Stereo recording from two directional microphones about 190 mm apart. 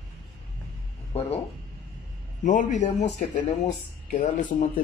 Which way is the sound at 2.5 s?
40° left (ahead or behind).